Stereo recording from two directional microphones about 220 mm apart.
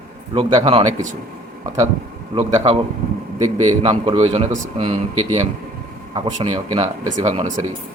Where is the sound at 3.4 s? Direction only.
25° right (ahead or behind).